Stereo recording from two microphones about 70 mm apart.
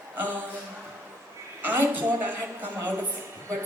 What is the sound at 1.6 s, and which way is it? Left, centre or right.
A woman's voice, right.